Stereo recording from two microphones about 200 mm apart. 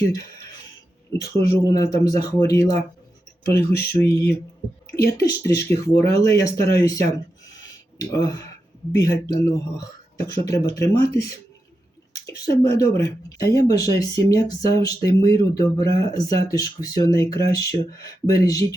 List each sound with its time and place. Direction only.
1.2 s speech: 15° left (ahead or behind)
3.4 s speech: 50° left (ahead or behind)
5.1 s speech: 15° left (ahead or behind)
8.1 s speech: 20° left (ahead or behind)